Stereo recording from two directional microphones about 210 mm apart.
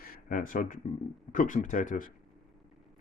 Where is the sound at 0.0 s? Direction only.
40° left (ahead or behind).